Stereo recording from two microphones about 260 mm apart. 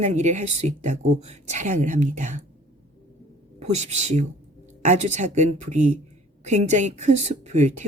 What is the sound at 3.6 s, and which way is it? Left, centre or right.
Speech, right.